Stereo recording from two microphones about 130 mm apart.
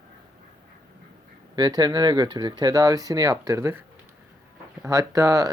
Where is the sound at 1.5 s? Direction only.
30° right (ahead or behind).